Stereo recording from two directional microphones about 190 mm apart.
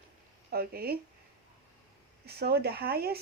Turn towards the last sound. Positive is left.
turn(degrees=-55)  # may be behind; listen again after turning